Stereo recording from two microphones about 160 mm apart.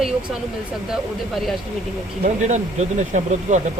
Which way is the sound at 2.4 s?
50° right (ahead or behind).